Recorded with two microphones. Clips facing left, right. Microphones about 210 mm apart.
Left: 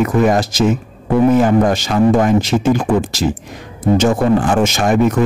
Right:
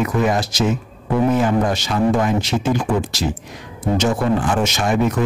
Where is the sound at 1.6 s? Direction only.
45° left (ahead or behind).